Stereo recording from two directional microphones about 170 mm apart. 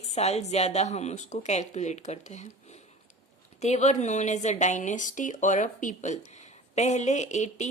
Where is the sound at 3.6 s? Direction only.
40° left (ahead or behind).